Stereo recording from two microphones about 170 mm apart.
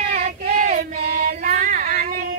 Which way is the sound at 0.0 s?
45° right (ahead or behind).